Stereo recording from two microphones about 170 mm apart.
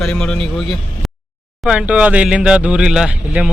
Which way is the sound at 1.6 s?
5° right (ahead or behind).